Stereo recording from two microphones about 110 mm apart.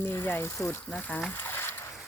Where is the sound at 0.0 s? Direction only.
20° left (ahead or behind).